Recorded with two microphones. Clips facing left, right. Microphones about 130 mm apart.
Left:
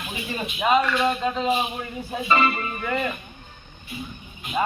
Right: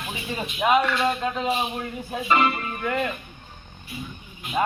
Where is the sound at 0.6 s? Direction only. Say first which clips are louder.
Even; centre (ahead or behind).